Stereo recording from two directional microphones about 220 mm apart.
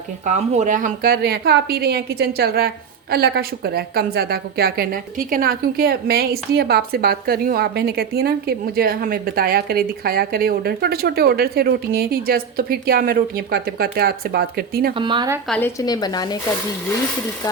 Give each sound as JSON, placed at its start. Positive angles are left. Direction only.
{"t": 0.3, "sound": "a woman's voice", "side_deg": -35}
{"t": 14.9, "sound": "a woman's voice", "side_deg": -20}
{"t": 15.4, "sound": "speech", "side_deg": 5}
{"t": 15.8, "sound": "speech", "side_deg": 15}